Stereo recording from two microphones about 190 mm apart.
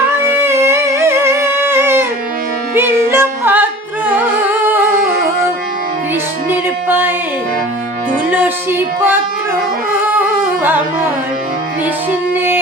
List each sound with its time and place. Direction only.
0.4 s music: 15° right (ahead or behind)
4.9 s music: 50° right (ahead or behind)
6.5 s music: 10° right (ahead or behind)
8.3 s music: 10° right (ahead or behind)
10.1 s music: 10° right (ahead or behind)